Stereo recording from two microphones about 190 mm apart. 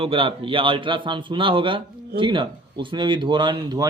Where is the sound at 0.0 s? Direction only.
30° right (ahead or behind).